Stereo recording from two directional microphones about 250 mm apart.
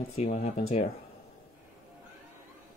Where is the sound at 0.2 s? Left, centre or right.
Left.